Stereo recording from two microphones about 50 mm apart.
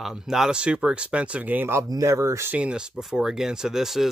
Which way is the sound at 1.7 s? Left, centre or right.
Right.